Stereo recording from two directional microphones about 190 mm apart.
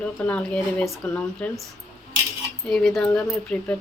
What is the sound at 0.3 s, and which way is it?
Speech, 5° left (ahead or behind).